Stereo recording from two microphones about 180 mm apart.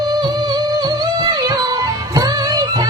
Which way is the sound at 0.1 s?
20° right (ahead or behind).